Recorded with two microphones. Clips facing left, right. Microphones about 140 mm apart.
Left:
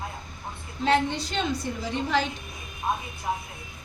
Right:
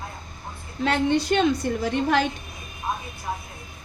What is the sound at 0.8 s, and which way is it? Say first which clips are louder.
A woman's voice: right 3 dB; 60° right (ahead or behind).